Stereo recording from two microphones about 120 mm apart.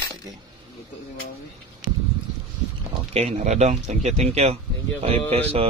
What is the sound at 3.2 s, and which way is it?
Speech, 65° right (ahead or behind).